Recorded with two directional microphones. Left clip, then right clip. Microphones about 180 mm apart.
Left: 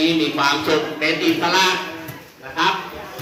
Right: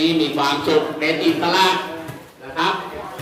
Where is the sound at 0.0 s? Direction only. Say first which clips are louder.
Even; 30° left (ahead or behind).